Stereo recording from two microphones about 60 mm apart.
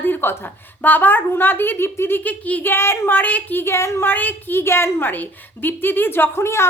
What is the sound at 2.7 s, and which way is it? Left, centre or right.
Child singing, left.